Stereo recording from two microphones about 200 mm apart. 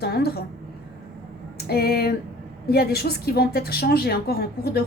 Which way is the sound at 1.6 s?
50° left (ahead or behind).